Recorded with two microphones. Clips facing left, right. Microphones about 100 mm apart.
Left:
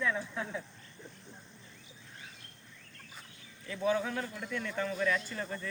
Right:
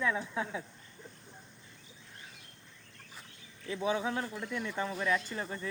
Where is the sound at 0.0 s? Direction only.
15° right (ahead or behind).